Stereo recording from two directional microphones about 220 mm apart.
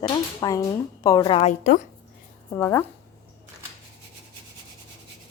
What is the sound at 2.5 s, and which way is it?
Speech, 10° left (ahead or behind).